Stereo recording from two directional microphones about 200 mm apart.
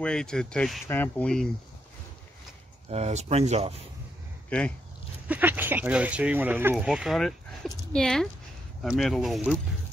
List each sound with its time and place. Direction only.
0.0 s speech: 5° left (ahead or behind)
2.9 s speech: 35° right (ahead or behind)
4.5 s speech: 5° left (ahead or behind)
5.3 s speech: 10° right (ahead or behind)